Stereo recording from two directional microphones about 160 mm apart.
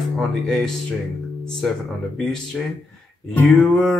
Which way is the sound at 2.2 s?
5° left (ahead or behind).